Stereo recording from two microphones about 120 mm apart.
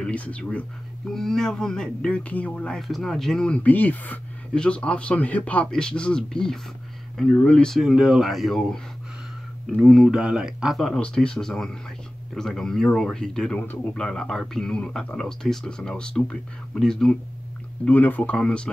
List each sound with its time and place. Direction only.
0.0 s speech: 10° left (ahead or behind)
13.6 s speech: 15° left (ahead or behind)